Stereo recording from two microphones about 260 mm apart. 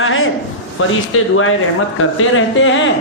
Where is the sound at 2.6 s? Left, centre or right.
Left.